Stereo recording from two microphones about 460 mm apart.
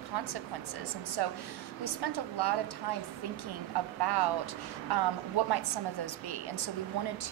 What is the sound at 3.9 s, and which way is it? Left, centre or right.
A woman's voice, right.